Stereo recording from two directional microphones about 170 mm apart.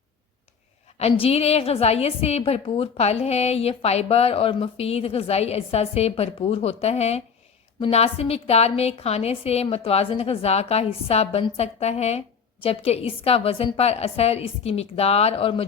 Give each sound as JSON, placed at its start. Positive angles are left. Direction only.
{"t": 0.9, "sound": "a woman's voice", "side_deg": 35}